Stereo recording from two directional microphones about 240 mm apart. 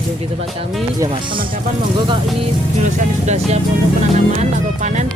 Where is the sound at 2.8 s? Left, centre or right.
Right.